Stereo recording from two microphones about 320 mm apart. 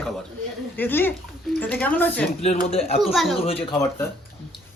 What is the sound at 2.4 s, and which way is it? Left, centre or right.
Speech, centre.